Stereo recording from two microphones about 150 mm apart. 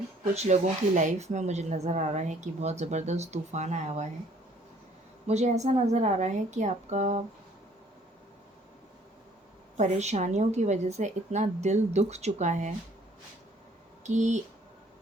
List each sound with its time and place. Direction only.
0.3 s speech: 50° right (ahead or behind)
5.3 s speech: 50° right (ahead or behind)
9.7 s speech: 50° right (ahead or behind)
14.0 s speech: 50° right (ahead or behind)